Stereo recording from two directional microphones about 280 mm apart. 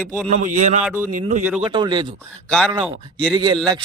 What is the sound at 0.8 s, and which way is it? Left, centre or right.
Speech, centre.